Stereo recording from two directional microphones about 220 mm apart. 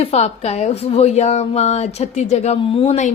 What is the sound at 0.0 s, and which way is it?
A woman's voice, 30° left (ahead or behind).